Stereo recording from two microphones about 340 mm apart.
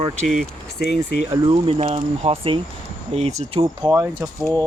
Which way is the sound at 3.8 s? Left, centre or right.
Centre.